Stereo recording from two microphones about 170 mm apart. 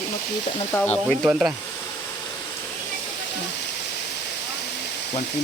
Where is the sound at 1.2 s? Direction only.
5° right (ahead or behind).